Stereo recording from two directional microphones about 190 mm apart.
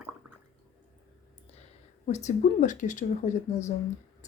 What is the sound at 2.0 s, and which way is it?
Speech, 40° left (ahead or behind).